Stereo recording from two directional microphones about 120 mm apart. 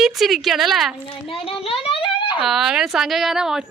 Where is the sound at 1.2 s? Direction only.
50° left (ahead or behind).